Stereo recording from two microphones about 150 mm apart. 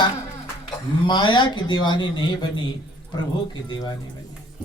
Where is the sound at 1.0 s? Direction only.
30° left (ahead or behind).